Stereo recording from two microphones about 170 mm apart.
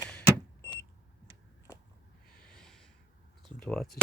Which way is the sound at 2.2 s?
5° left (ahead or behind).